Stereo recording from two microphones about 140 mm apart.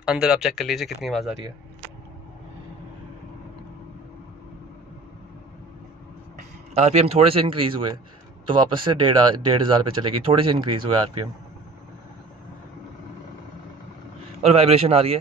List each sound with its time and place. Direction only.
0.0 s speech: 5° right (ahead or behind)
6.8 s speech: 50° right (ahead or behind); by 11.0 s 35° right (ahead or behind)
14.4 s speech: 45° right (ahead or behind)